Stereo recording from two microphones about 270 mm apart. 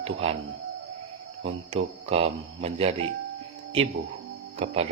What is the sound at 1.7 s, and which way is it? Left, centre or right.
Speech, right.